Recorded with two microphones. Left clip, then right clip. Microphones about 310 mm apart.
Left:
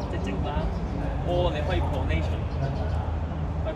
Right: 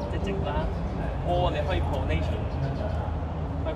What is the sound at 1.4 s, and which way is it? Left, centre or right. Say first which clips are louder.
Speech: even; centre.